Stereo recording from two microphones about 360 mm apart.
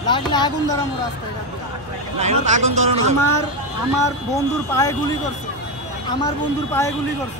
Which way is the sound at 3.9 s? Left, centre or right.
Centre.